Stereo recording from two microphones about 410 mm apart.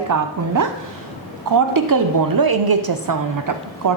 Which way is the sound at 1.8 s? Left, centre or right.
Right.